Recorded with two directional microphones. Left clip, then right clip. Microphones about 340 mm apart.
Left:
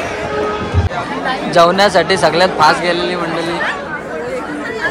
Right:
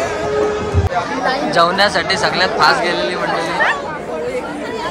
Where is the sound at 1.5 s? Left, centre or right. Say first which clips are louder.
Left 5 dB; centre.